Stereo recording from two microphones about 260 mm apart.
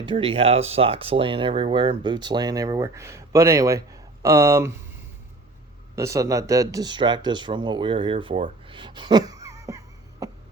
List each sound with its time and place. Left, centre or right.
0.0 s speech: centre
6.0 s speech: centre